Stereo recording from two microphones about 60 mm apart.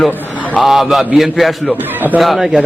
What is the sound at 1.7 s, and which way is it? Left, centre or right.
Speech, right.